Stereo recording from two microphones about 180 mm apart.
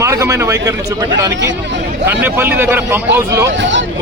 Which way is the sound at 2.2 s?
10° right (ahead or behind).